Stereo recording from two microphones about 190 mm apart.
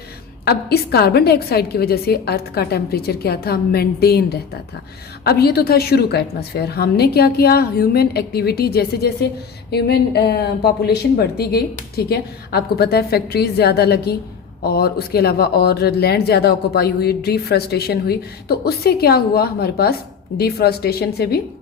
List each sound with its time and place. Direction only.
0.4 s speech: 55° left (ahead or behind)